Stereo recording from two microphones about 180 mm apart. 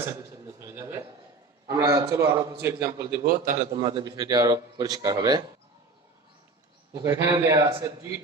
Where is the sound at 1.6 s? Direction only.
20° right (ahead or behind).